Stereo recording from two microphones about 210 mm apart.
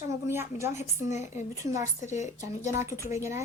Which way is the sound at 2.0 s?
35° left (ahead or behind).